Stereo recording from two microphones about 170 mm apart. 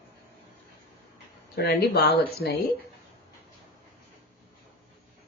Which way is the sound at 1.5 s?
70° left (ahead or behind).